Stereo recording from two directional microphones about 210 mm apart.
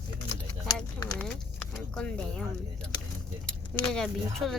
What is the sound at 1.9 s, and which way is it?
Speech, 5° left (ahead or behind).